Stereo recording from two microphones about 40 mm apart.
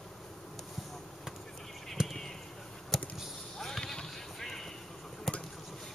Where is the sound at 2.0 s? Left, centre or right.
Centre.